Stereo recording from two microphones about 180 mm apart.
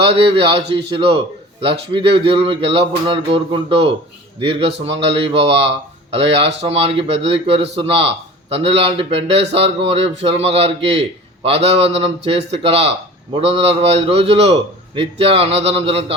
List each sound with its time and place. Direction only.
0.0 s speech: 30° right (ahead or behind)